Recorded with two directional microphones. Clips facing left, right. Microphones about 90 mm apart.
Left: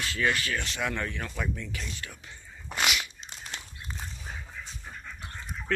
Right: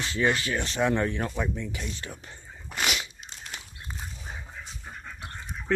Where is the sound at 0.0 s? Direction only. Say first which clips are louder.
Right 3 dB; 25° right (ahead or behind).